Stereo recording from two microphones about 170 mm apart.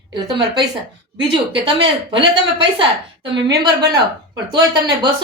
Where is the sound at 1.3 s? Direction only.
30° right (ahead or behind).